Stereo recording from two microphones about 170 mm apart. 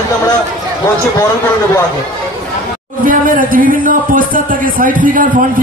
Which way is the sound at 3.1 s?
55° right (ahead or behind).